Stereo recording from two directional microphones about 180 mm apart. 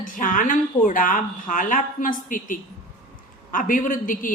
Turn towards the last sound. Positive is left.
turn(degrees=50)  # may be behind; listen again after turning